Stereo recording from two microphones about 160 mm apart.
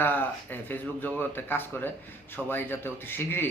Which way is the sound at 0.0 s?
10° left (ahead or behind).